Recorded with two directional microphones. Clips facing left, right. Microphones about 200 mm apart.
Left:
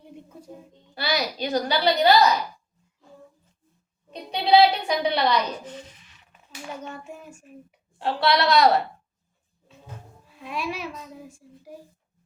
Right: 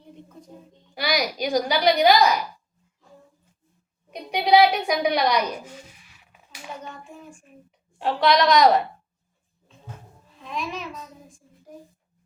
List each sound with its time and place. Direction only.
0.9 s a woman's voice: 15° right (ahead or behind)
4.1 s a woman's voice: 15° right (ahead or behind)
7.9 s a woman's voice: 15° right (ahead or behind)
10.4 s a child's voice: 10° left (ahead or behind)